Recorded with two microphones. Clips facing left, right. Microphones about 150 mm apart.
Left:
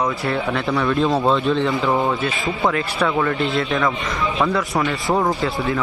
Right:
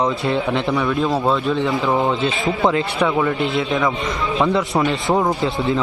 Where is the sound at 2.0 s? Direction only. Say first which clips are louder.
Right 2 dB; 20° right (ahead or behind).